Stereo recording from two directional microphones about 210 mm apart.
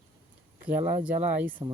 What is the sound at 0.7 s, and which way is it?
Speech, 10° right (ahead or behind).